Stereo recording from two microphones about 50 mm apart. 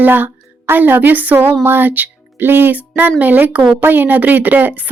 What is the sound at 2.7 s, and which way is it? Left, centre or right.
Speech, right.